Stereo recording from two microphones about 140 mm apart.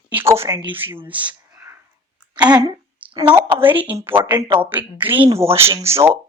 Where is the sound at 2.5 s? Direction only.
30° right (ahead or behind).